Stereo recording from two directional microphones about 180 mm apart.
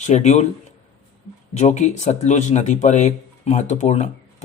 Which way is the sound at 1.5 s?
40° left (ahead or behind).